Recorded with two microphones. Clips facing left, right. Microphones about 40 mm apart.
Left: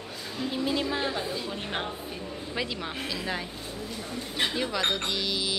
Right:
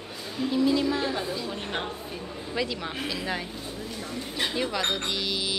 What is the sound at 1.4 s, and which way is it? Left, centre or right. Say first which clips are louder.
A woman's voice: right 1 dB; centre.